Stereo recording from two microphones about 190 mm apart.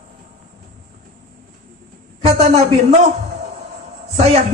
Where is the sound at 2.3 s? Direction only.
35° right (ahead or behind).